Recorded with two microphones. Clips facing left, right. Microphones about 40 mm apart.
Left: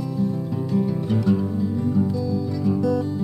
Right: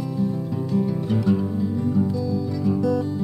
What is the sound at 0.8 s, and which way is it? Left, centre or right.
Music, centre.